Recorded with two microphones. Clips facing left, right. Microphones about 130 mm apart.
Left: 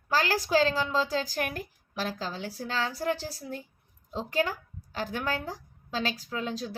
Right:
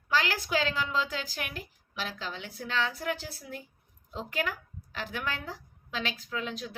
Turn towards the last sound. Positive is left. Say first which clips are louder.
# left 3 dB
turn(degrees=35)  # may be behind; listen again after turning